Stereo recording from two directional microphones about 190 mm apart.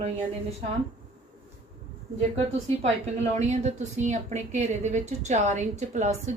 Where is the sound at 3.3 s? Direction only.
35° right (ahead or behind).